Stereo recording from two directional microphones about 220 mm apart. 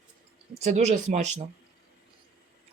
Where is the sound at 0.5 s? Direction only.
30° right (ahead or behind).